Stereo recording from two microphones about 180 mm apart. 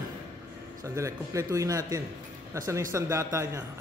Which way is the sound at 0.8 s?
15° right (ahead or behind).